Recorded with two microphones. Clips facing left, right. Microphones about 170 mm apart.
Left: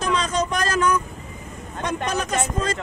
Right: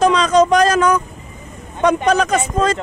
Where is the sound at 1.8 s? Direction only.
80° right.